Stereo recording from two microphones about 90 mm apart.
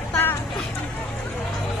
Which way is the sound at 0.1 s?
20° left (ahead or behind).